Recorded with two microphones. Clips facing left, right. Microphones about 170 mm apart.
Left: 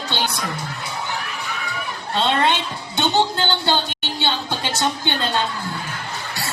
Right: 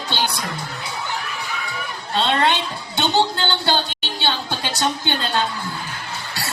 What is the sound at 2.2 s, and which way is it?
A woman's voice, 20° left (ahead or behind).